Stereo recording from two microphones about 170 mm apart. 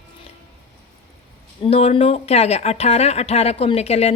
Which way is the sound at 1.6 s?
35° left (ahead or behind).